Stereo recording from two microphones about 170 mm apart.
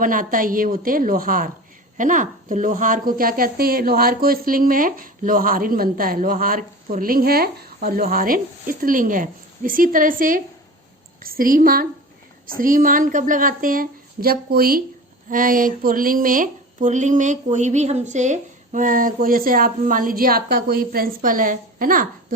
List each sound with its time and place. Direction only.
0.0 s a woman's voice: 55° right (ahead or behind)